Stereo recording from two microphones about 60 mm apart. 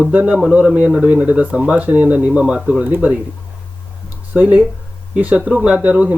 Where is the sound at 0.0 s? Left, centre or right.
Right.